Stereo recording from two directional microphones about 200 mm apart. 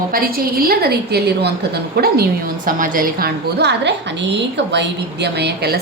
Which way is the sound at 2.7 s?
45° right (ahead or behind).